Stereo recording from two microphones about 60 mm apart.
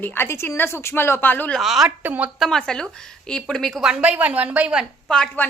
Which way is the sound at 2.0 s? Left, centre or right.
Right.